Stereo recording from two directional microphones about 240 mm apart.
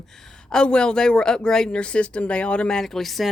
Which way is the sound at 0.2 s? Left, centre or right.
Centre.